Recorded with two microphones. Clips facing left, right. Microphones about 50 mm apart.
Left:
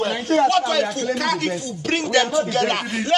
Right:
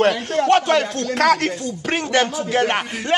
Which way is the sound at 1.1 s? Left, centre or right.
Right.